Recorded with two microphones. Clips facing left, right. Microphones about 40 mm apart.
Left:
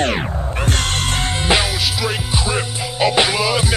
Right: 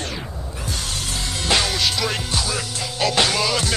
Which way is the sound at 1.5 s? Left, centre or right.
Left.